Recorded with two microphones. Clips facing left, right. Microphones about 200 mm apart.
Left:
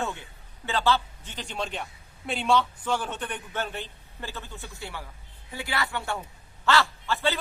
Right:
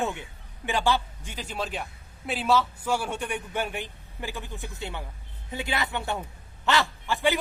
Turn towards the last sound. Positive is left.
turn(degrees=-15)  # may be behind; listen again after turning